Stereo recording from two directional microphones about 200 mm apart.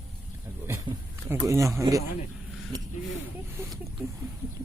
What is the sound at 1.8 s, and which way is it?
Speech, 15° right (ahead or behind).